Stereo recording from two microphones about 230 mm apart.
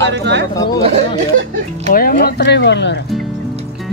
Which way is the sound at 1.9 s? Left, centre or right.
Left.